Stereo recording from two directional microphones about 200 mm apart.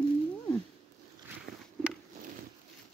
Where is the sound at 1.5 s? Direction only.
50° right (ahead or behind).